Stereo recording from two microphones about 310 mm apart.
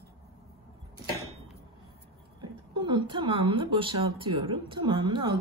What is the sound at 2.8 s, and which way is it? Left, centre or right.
Speech, centre.